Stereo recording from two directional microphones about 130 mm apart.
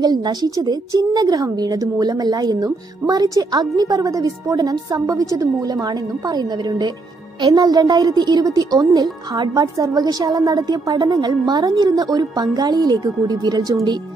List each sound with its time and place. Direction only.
0.0 s speech: 30° right (ahead or behind)